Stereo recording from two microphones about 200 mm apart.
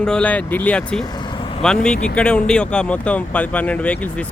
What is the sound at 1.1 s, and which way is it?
Vehicle, 20° left (ahead or behind).